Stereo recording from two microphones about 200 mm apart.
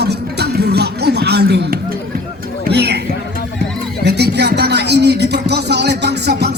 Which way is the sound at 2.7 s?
55° right (ahead or behind).